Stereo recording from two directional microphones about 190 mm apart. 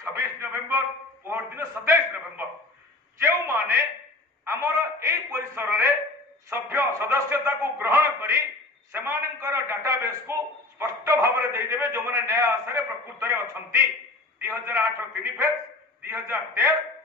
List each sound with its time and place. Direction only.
0.0 s a man's voice: 15° right (ahead or behind)